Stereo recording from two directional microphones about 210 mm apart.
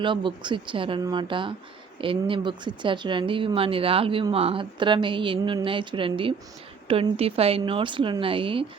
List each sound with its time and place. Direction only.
0.0 s speech: 25° right (ahead or behind)